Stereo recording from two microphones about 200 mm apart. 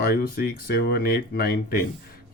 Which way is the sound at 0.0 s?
50° left (ahead or behind).